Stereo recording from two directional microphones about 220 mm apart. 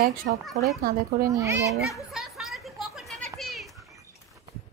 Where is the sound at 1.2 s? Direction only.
15° right (ahead or behind).